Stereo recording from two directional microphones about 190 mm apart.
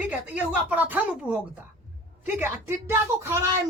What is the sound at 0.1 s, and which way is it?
A woman's voice, 5° right (ahead or behind).